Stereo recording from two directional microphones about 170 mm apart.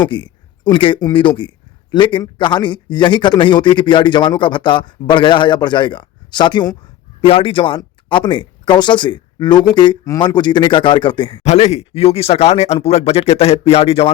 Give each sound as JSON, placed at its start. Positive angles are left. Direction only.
{"t": 0.1, "sound": "speech", "side_deg": 25}
{"t": 11.4, "sound": "speech", "side_deg": 40}